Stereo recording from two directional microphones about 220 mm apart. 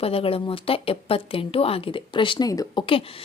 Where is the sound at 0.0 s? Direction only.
25° left (ahead or behind).